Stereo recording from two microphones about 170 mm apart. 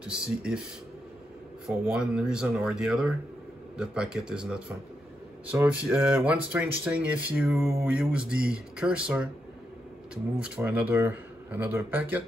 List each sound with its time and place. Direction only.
0.1 s speech: 5° right (ahead or behind)
1.7 s speech: 5° right (ahead or behind)